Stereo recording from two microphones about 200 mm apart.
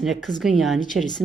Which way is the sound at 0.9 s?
90° right.